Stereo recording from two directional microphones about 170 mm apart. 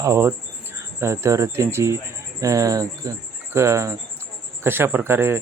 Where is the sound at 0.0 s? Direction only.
15° right (ahead or behind).